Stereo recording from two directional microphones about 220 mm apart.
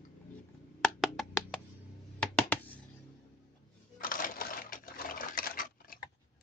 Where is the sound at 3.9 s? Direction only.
40° left (ahead or behind).